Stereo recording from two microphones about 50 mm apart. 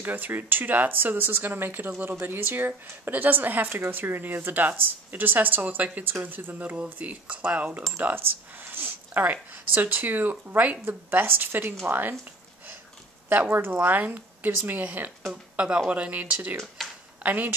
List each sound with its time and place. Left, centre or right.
0.0 s speech: right
6.8 s speech: right
8.0 s speech: right
13.3 s speech: right
15.5 s speech: right
16.8 s a sound: centre
17.2 s speech: right